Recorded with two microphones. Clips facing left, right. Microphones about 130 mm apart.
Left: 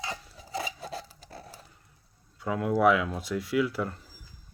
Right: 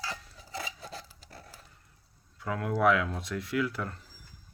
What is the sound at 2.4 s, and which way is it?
Speech, 5° left (ahead or behind).